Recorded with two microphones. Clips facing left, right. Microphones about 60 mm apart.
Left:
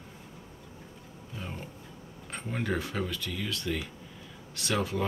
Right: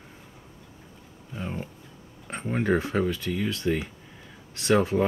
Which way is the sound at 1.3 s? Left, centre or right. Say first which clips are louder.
Right 7 dB; centre.